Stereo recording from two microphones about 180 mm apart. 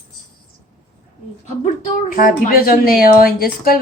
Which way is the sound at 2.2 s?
55° left (ahead or behind).